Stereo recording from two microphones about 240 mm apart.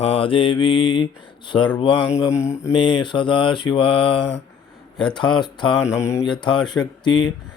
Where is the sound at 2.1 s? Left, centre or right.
Centre.